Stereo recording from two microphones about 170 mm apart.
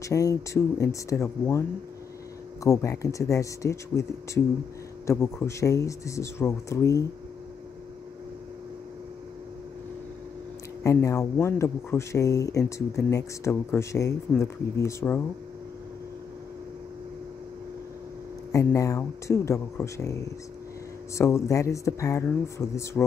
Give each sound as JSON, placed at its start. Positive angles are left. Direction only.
{"t": 0.0, "sound": "speech", "side_deg": 20}
{"t": 2.6, "sound": "speech", "side_deg": 20}
{"t": 10.8, "sound": "speech", "side_deg": 20}
{"t": 18.5, "sound": "speech", "side_deg": 20}